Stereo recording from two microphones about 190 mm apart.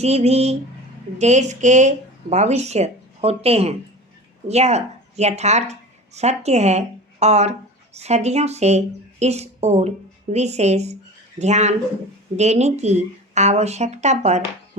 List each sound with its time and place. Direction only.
0.0 s a woman's voice: 35° right (ahead or behind)